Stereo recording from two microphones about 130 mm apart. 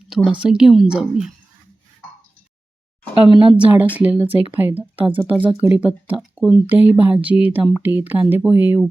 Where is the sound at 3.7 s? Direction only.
10° right (ahead or behind).